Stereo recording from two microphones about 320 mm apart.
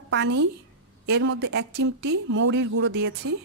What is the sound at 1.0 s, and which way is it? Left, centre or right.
Speech, right.